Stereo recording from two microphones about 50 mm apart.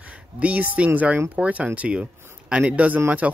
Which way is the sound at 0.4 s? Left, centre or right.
Right.